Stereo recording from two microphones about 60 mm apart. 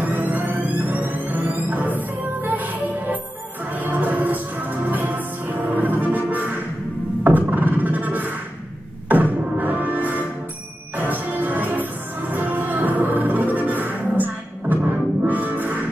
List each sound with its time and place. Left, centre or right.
0.0 s music: right
7.2 s a sound: right
9.1 s music: right